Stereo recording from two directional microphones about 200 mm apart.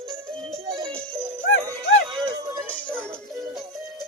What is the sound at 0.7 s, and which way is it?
Music, 25° right (ahead or behind).